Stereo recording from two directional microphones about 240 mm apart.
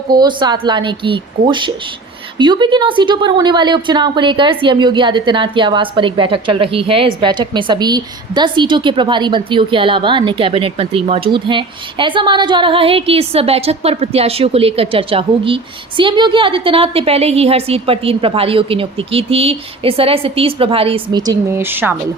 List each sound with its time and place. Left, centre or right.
0.1 s a woman's voice: centre